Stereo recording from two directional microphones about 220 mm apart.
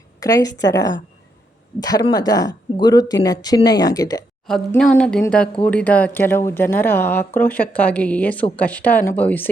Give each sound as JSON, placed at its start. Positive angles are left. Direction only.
{"t": 0.2, "sound": "speech", "side_deg": 15}
{"t": 4.4, "sound": "speech", "side_deg": 0}